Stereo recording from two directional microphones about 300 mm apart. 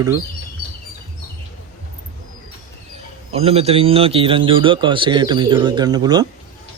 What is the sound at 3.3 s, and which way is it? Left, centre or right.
A man's voice, centre.